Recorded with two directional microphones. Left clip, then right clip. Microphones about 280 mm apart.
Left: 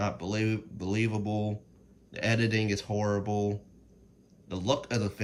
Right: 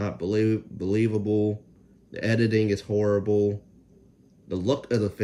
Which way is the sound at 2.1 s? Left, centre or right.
Centre.